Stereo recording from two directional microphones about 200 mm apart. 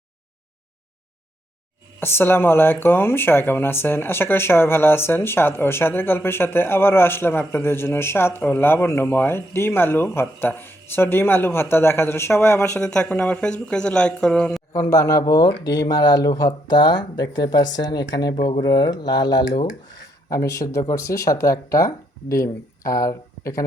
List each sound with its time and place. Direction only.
2.0 s speech: 10° left (ahead or behind)
14.7 s speech: 15° left (ahead or behind)